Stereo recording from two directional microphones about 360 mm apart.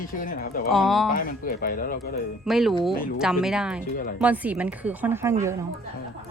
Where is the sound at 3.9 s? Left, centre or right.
Left.